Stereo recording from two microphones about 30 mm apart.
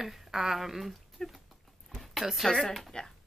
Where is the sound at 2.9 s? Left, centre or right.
Left.